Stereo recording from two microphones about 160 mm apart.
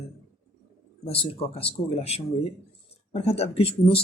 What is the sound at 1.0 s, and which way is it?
Speech, 40° left (ahead or behind).